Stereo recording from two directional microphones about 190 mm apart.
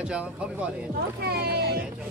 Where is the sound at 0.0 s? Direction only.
5° right (ahead or behind).